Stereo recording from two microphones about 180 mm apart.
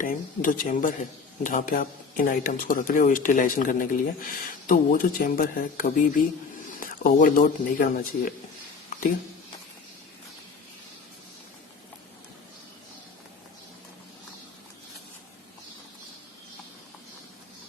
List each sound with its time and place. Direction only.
0.0 s speech: 50° left (ahead or behind)